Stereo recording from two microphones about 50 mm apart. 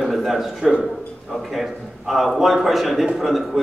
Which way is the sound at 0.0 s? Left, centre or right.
Centre.